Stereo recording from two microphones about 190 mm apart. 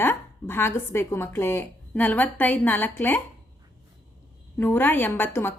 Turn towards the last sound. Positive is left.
turn(degrees=10)  # may be behind; listen again after turning